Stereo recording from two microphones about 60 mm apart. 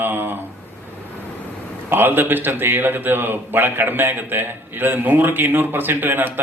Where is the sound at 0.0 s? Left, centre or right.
Right.